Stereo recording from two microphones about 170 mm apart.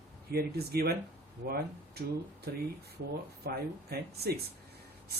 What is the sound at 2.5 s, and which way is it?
Speech, 70° right (ahead or behind).